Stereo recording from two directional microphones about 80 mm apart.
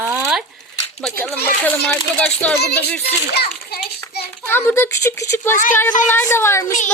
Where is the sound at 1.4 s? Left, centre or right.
Left.